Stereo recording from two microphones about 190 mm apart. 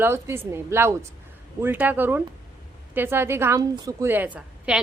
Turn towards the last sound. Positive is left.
turn(degrees=-5)  # may be behind; listen again after turning